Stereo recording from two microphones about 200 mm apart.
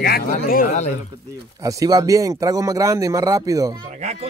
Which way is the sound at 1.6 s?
15° right (ahead or behind).